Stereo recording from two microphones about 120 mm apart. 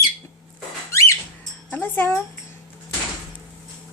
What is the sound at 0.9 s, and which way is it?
Squeak, 25° left (ahead or behind).